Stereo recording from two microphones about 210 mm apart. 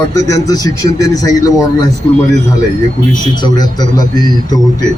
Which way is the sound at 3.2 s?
20° left (ahead or behind).